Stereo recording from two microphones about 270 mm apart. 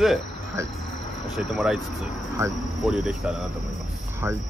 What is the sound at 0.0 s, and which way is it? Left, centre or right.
Speech, centre.